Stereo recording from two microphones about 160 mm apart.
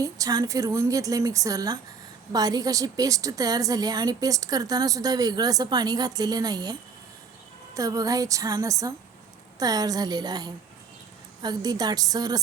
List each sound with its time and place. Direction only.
0.0 s a woman's voice: 20° right (ahead or behind)